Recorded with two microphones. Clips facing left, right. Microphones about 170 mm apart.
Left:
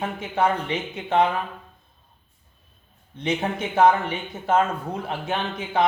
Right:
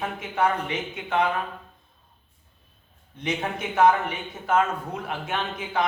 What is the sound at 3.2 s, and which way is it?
A man's voice, 30° left (ahead or behind).